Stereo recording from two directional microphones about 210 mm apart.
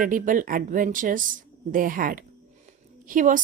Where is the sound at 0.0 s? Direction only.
40° right (ahead or behind).